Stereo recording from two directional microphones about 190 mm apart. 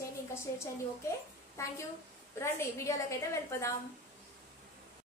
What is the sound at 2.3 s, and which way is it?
A woman's voice, 15° left (ahead or behind).